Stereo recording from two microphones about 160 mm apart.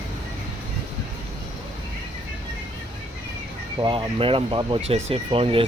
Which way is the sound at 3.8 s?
35° right (ahead or behind).